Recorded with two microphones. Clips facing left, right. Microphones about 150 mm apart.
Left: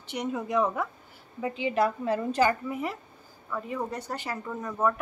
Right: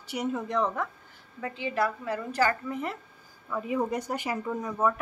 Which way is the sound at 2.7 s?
Centre (ahead or behind).